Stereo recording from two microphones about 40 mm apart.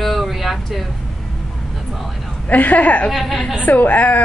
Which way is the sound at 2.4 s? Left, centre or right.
Left.